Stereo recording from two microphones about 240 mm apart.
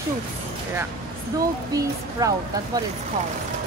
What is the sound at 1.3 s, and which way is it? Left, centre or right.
Speech, centre.